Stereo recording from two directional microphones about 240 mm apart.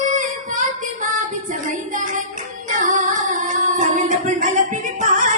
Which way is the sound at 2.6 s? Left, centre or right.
Right.